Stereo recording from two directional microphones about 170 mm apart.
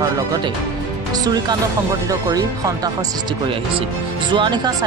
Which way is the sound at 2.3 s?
20° right (ahead or behind).